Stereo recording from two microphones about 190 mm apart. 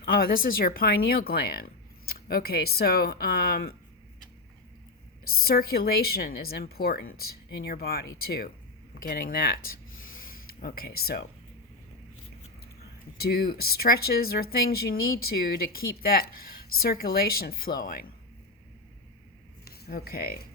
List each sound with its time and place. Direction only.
0.0 s speech: 50° left (ahead or behind)
5.2 s speech: 50° left (ahead or behind)
9.6 s a sound: 50° left (ahead or behind)
13.1 s speech: 55° left (ahead or behind)
19.6 s speech: 55° left (ahead or behind)